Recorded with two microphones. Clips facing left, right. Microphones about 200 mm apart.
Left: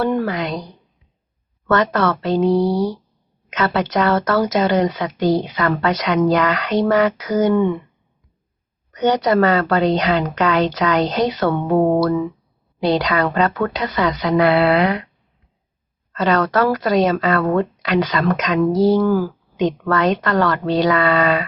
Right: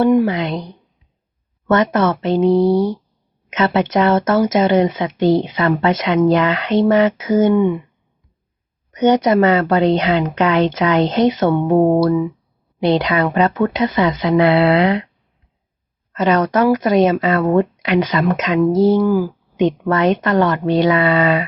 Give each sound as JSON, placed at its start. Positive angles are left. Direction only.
{"t": 0.1, "sound": "speech", "side_deg": -15}
{"t": 1.6, "sound": "speech", "side_deg": -20}
{"t": 8.9, "sound": "speech", "side_deg": -20}
{"t": 16.1, "sound": "speech", "side_deg": -20}